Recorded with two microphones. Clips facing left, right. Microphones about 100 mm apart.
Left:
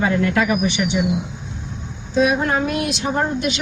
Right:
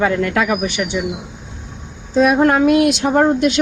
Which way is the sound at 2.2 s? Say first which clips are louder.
Right 5 dB; 55° right (ahead or behind).